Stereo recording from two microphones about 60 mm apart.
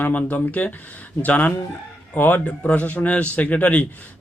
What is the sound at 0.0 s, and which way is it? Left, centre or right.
Speech, left.